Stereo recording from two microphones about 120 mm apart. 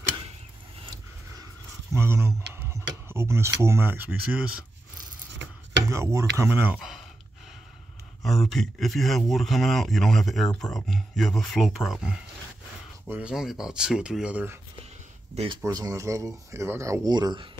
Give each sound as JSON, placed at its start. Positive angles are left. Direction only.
{"t": 1.9, "sound": "speech", "side_deg": -20}
{"t": 5.9, "sound": "speech", "side_deg": -25}
{"t": 6.8, "sound": "speech", "side_deg": -5}
{"t": 8.2, "sound": "speech", "side_deg": 0}
{"t": 15.6, "sound": "speech", "side_deg": -30}
{"t": 17.1, "sound": "speech", "side_deg": -35}